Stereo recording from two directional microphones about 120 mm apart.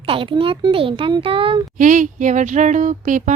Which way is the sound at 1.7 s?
90° right.